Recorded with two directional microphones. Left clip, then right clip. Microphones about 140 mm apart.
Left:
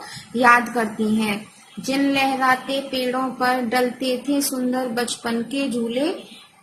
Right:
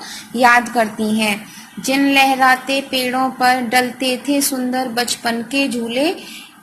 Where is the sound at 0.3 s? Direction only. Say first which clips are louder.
Right 3 dB; 20° right (ahead or behind).